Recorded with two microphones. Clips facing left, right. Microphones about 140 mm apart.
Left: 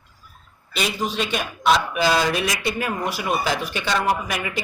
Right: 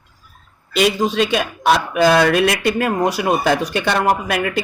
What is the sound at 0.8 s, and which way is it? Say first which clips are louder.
Speech: right 8 dB; 90° right.